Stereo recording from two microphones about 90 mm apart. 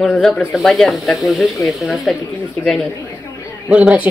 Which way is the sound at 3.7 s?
10° right (ahead or behind).